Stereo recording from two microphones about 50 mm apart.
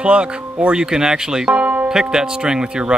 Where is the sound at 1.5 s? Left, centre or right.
Right.